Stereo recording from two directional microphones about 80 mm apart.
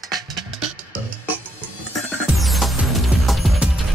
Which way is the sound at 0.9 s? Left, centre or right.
Centre.